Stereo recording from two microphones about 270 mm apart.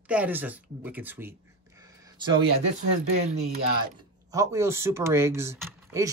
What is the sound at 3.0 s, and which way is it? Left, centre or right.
Speech, right.